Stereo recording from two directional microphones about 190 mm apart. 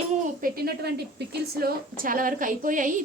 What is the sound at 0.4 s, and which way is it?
A woman's voice, 55° right (ahead or behind).